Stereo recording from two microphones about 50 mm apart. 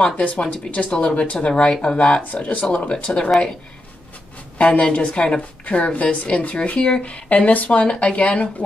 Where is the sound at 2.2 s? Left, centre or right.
Left.